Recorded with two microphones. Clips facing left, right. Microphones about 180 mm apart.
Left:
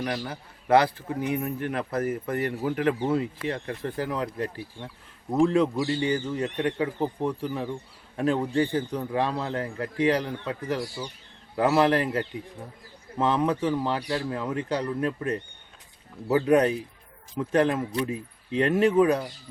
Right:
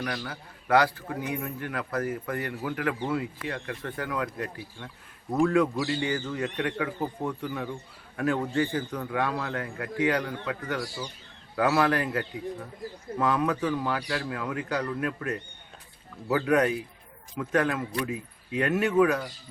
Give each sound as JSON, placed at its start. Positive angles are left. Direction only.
{"t": 0.0, "sound": "a man's voice", "side_deg": 25}